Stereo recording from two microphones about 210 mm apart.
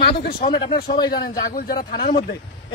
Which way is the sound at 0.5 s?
20° left (ahead or behind).